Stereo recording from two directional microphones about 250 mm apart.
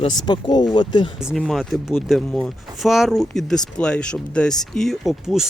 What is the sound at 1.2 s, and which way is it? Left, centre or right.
Speech, centre.